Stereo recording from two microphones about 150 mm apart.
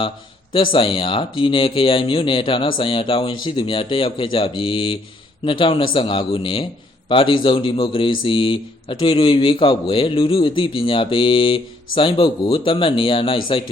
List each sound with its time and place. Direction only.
0.5 s speech: 35° left (ahead or behind)